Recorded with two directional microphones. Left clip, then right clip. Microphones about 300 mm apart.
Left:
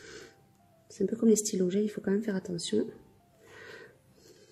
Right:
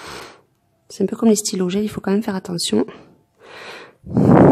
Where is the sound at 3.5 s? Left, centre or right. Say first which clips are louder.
Right 13 dB; centre.